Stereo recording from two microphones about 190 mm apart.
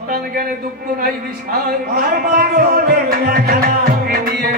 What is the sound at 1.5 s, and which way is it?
Speech, 55° right (ahead or behind).